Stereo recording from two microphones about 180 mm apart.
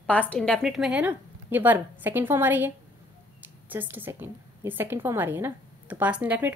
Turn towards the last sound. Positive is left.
turn(degrees=-10)  # may be behind; listen again after turning